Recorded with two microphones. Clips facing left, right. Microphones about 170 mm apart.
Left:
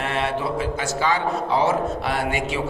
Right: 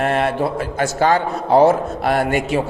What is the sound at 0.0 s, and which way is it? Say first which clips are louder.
A man's voice: right 6 dB; 50° right (ahead or behind).